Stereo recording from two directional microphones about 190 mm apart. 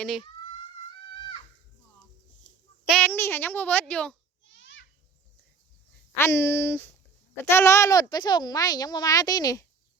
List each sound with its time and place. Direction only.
0.0 s speech: centre (ahead or behind)
2.8 s a child's voice: 5° left (ahead or behind)
4.4 s a sound: 80° left
6.1 s a child's voice: 15° left (ahead or behind)